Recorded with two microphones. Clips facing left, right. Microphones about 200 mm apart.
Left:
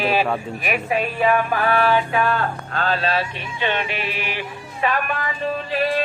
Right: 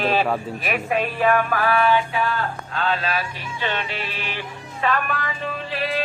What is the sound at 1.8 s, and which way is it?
Mantra, 50° left (ahead or behind).